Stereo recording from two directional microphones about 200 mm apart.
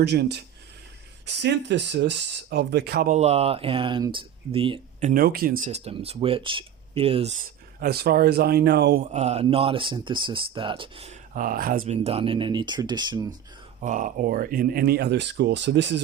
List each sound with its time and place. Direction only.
0.0 s speech: 55° right (ahead or behind)
3.2 s speech: 30° right (ahead or behind); by 9.0 s 55° right (ahead or behind)
9.1 s speech: 35° right (ahead or behind)
11.9 s speech: 30° right (ahead or behind)
13.8 s speech: 40° right (ahead or behind); by 16.0 s 60° right (ahead or behind)